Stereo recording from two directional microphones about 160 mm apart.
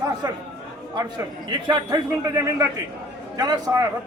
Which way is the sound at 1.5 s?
30° right (ahead or behind).